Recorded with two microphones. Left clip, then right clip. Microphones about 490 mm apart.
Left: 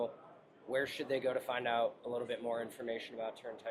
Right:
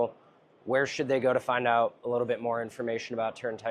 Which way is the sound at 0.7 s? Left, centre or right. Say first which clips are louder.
Right 9 dB; right.